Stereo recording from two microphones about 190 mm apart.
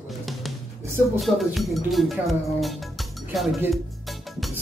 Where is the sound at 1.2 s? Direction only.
Centre (ahead or behind).